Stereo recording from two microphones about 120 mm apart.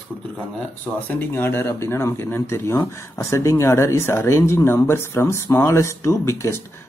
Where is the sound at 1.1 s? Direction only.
15° left (ahead or behind).